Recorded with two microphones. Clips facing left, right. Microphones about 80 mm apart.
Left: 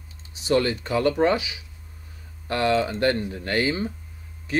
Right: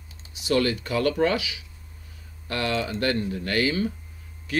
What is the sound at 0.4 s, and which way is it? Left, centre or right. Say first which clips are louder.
Speech: left 1 dB; left.